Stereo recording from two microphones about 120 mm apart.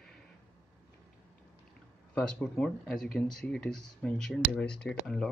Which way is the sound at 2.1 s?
10° left (ahead or behind).